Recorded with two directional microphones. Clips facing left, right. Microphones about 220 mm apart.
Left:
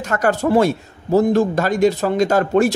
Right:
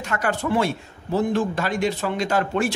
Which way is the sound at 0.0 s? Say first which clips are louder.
Left 7 dB; 40° left (ahead or behind).